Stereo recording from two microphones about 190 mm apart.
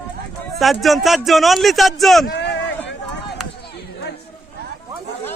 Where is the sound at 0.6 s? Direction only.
Centre (ahead or behind).